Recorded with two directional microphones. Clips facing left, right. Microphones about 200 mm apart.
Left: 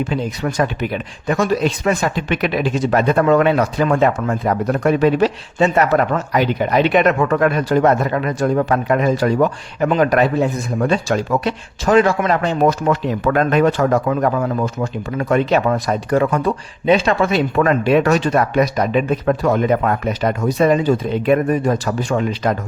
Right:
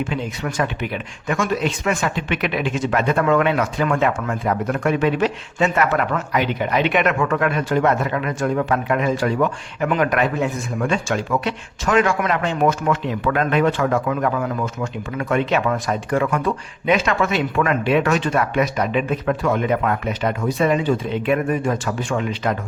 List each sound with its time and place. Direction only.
0.0 s speech: 35° left (ahead or behind)